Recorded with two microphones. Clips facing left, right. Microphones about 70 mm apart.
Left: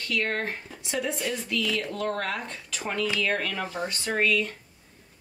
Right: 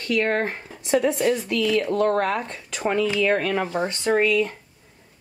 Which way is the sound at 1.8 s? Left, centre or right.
Right.